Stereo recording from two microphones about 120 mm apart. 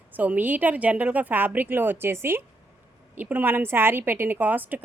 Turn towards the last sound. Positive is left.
turn(degrees=-15)  # may be behind; listen again after turning